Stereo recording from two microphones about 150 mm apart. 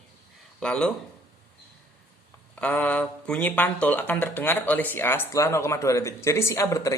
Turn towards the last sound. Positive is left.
turn(degrees=20)  # may be behind; listen again after turning